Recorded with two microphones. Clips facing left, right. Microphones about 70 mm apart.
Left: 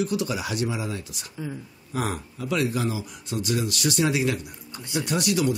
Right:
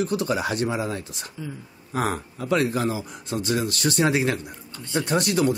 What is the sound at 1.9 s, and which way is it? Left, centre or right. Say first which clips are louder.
Speech: right 3 dB; right.